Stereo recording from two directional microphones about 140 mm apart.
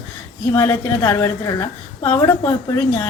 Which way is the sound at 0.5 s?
20° left (ahead or behind).